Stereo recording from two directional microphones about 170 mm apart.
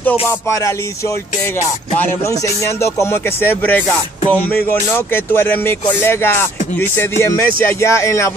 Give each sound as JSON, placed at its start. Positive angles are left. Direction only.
{"t": 0.3, "sound": "speech", "side_deg": 15}